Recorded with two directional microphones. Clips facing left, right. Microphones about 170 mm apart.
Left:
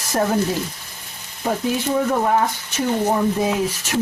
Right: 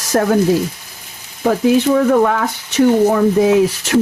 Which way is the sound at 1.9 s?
90° right.